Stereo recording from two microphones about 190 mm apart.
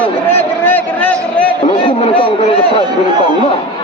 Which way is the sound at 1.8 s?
30° left (ahead or behind).